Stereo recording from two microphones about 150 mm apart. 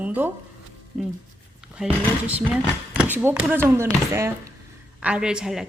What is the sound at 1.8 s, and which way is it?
Speech, 5° right (ahead or behind).